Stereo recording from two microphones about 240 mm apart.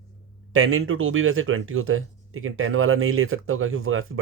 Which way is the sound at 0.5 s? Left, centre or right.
Right.